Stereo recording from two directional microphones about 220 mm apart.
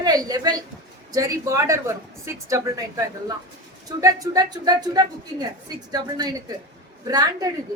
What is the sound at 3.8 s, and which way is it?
A woman's voice, 15° right (ahead or behind).